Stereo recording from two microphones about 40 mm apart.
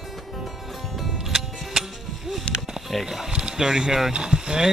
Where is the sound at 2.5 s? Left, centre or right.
Left.